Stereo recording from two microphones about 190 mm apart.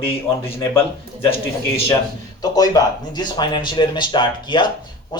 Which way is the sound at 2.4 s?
20° left (ahead or behind).